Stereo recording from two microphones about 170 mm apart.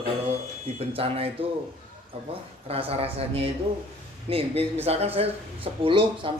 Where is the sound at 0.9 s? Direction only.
35° right (ahead or behind).